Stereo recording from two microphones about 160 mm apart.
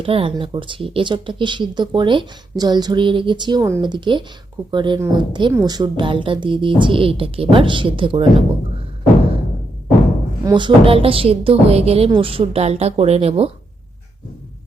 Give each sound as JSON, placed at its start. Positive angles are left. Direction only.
{"t": 0.0, "sound": "a woman's voice", "side_deg": -35}
{"t": 10.4, "sound": "a woman's voice", "side_deg": -30}